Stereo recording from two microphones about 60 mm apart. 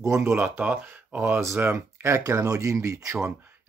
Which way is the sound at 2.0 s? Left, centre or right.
Right.